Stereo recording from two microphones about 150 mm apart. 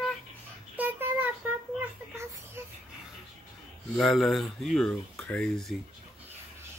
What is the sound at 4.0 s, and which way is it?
Speech, centre (ahead or behind).